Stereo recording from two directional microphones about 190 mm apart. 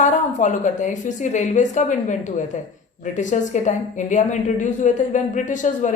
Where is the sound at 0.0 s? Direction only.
40° left (ahead or behind).